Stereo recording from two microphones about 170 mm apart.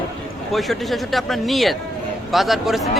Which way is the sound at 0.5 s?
Centre (ahead or behind).